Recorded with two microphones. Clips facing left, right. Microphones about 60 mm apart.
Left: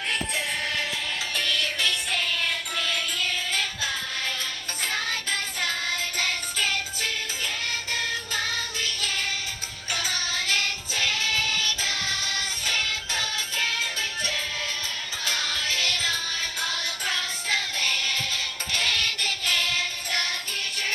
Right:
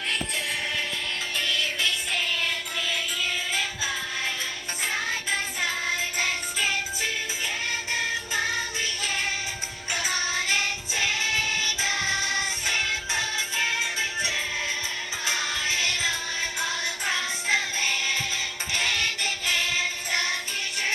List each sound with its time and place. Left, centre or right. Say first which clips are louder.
1.4 s music: even; centre